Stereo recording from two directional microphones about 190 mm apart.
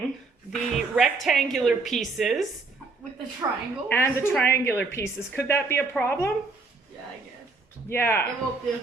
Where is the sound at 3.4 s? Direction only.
15° right (ahead or behind).